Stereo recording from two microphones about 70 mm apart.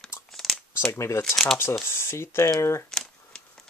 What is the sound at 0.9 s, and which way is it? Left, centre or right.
Speech, left.